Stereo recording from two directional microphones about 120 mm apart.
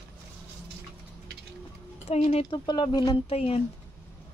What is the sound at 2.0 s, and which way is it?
Speech, 65° left (ahead or behind).